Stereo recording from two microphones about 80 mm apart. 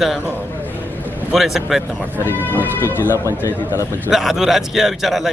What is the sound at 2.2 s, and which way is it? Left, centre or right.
Speech, left.